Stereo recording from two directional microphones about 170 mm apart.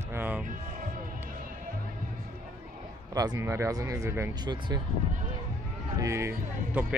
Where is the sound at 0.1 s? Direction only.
10° right (ahead or behind).